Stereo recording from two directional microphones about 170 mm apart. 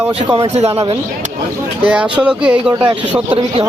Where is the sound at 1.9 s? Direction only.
5° right (ahead or behind).